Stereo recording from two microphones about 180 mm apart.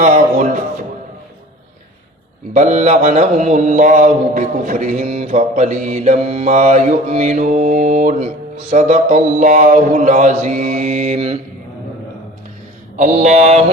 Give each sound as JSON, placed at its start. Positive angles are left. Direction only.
{"t": 0.0, "sound": "music", "side_deg": -45}
{"t": 2.5, "sound": "mantra", "side_deg": -40}
{"t": 13.0, "sound": "mantra", "side_deg": -40}